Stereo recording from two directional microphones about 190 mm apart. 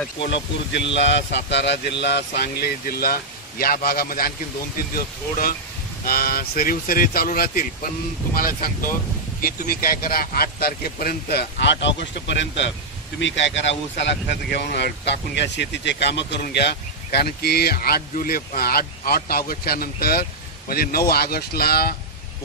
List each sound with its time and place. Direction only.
0.2 s speech: 65° left (ahead or behind); by 4.3 s 50° left (ahead or behind)
6.0 s speech: 50° left (ahead or behind)